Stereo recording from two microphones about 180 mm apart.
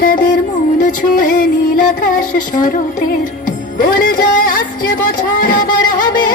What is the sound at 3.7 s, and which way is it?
Music, 50° left (ahead or behind).